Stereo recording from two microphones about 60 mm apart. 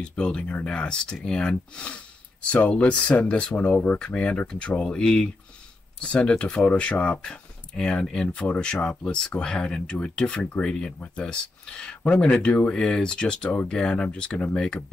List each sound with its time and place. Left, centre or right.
0.0 s speech: centre